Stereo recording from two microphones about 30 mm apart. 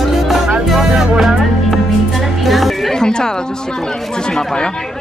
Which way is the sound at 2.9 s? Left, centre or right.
Left.